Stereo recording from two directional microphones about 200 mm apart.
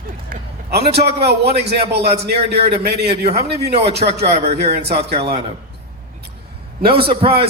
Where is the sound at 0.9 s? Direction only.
55° right (ahead or behind).